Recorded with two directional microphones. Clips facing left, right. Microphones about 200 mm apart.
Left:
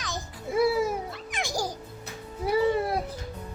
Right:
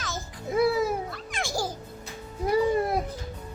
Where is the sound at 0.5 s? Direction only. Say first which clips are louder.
Even; 10° left (ahead or behind).